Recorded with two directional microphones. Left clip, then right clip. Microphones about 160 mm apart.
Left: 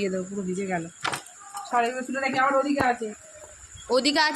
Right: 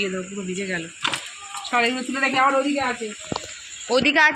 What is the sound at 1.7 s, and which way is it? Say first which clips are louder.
Speech: right 3 dB; 20° right (ahead or behind).